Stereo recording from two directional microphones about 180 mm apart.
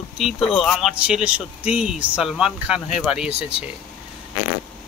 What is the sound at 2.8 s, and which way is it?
Speech, 35° left (ahead or behind).